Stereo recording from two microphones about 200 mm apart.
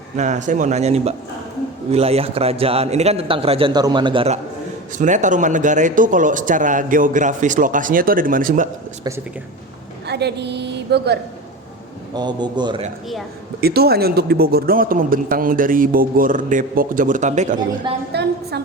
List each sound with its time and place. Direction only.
0.2 s a man's voice: 35° right (ahead or behind)
4.9 s speech: 40° right (ahead or behind)
10.1 s a woman's voice: 55° right (ahead or behind)
12.1 s a man's voice: 20° right (ahead or behind)
13.6 s a man's voice: 50° right (ahead or behind)
18.1 s a woman's voice: 55° right (ahead or behind)